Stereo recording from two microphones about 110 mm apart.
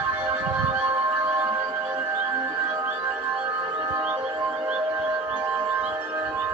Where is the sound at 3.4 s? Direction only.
30° right (ahead or behind).